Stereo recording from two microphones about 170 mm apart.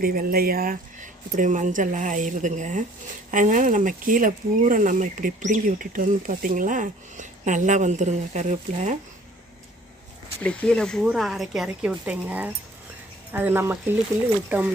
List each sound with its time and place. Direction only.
0.0 s speech: 60° right (ahead or behind)
10.4 s speech: 5° left (ahead or behind)